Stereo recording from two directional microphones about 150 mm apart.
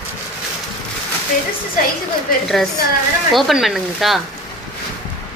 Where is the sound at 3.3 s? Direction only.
Centre (ahead or behind).